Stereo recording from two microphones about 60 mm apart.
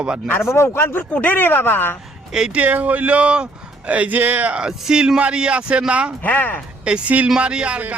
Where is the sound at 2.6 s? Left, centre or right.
Right.